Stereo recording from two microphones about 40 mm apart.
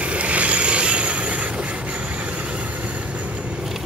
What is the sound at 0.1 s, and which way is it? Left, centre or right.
Vehicle, right.